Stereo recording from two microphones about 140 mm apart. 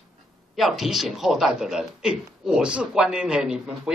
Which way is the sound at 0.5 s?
Centre (ahead or behind).